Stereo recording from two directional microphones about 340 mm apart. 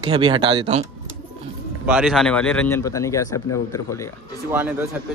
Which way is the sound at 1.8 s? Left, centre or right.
Centre.